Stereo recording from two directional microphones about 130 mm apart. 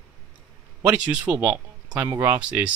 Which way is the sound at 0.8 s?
15° right (ahead or behind).